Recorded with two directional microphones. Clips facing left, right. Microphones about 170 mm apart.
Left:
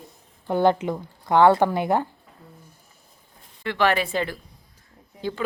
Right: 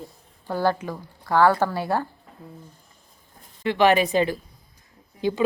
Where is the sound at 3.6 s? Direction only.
20° right (ahead or behind).